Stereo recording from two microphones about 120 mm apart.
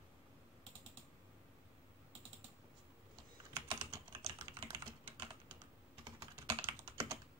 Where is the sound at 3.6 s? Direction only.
45° right (ahead or behind).